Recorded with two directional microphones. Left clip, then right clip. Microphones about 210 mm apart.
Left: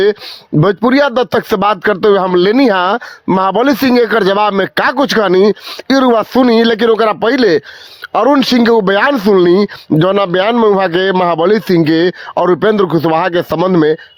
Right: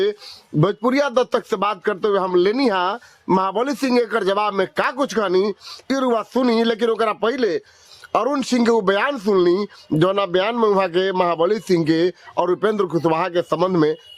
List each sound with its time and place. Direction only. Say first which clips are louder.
0.6 s speech: left 8 dB; 45° left (ahead or behind)